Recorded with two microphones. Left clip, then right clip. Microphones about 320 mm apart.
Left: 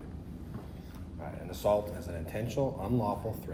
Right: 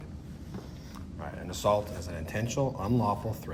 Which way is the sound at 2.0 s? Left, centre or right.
Right.